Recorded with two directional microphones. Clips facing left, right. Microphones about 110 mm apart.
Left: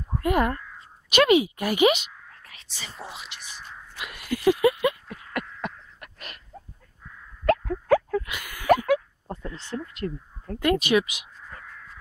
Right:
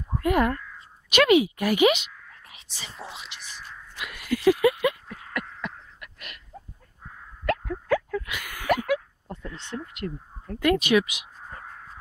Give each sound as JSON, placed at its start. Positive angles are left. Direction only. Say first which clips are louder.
{"t": 0.2, "sound": "speech", "louder": "right 1 dB", "side_deg": 25}
{"t": 2.4, "sound": "whispering", "louder": "left 1 dB", "side_deg": -15}
{"t": 2.9, "sound": "speech", "louder": "even", "side_deg": 5}
{"t": 4.0, "sound": "speech", "louder": "right 1 dB", "side_deg": 25}
{"t": 5.6, "sound": "a sound", "louder": "left 2 dB", "side_deg": 40}
{"t": 7.4, "sound": "plop", "louder": "left 4 dB", "side_deg": 40}
{"t": 8.6, "sound": "a sound", "louder": "left 4 dB", "side_deg": 35}
{"t": 11.5, "sound": "dog", "louder": "right 2 dB", "side_deg": -40}